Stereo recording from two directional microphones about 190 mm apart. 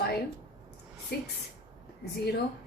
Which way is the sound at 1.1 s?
55° left (ahead or behind).